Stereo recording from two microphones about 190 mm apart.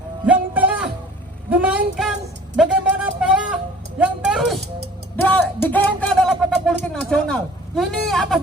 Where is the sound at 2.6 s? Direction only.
5° right (ahead or behind).